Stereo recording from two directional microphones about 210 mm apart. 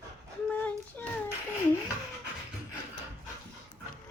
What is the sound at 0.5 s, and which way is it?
Child singing, 10° left (ahead or behind).